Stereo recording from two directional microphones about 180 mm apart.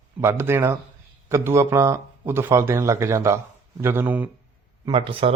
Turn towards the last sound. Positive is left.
turn(degrees=-30)  # may be behind; listen again after turning